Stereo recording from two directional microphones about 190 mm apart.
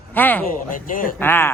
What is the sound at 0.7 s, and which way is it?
Speech, 45° left (ahead or behind).